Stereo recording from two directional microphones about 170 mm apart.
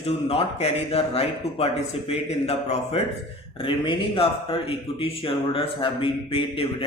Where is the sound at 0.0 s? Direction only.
35° left (ahead or behind).